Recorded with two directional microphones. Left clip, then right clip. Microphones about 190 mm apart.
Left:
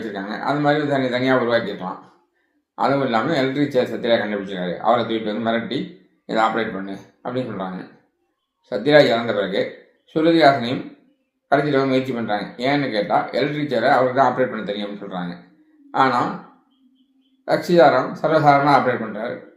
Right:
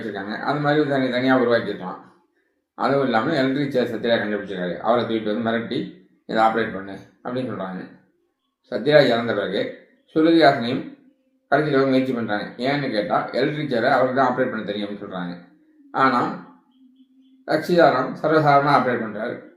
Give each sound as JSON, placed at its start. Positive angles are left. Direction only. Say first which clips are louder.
{"t": 0.1, "sound": "speech", "louder": "left 1 dB", "side_deg": 20}
{"t": 8.7, "sound": "speech", "louder": "left 2 dB", "side_deg": 20}
{"t": 17.4, "sound": "speech", "louder": "left 2 dB", "side_deg": 20}